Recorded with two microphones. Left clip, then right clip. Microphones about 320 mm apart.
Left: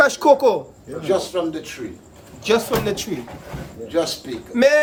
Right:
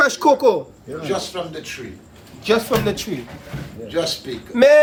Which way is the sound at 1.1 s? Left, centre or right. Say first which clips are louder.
Left 5 dB; left.